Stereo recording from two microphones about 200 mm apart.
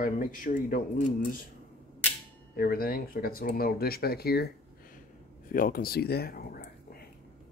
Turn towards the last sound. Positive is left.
turn(degrees=50)  # may be behind; listen again after turning